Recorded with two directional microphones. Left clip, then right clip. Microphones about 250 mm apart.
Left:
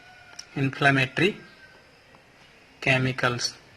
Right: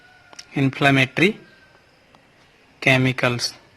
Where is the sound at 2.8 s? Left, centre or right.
Right.